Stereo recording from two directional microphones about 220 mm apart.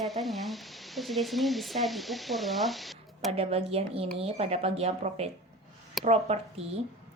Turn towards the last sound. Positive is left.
turn(degrees=-30)  # may be behind; listen again after turning